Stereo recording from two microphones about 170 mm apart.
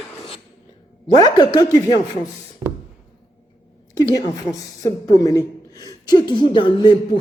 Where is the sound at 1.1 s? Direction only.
25° left (ahead or behind).